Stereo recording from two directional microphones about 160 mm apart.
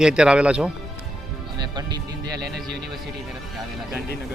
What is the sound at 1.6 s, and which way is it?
Speech, 25° right (ahead or behind).